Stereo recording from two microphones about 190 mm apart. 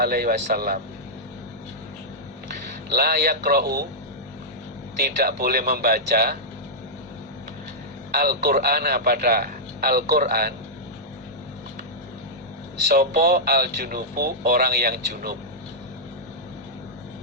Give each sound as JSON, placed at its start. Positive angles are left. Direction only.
{"t": 0.0, "sound": "speech", "side_deg": -55}
{"t": 2.9, "sound": "speech", "side_deg": -55}
{"t": 5.2, "sound": "speech", "side_deg": -55}
{"t": 8.1, "sound": "speech", "side_deg": -55}
{"t": 12.9, "sound": "speech", "side_deg": -55}